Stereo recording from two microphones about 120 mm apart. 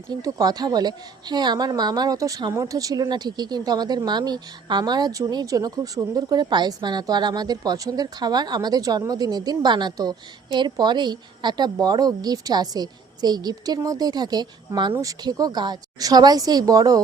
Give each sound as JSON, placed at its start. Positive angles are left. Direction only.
{"t": 0.1, "sound": "speech", "side_deg": -30}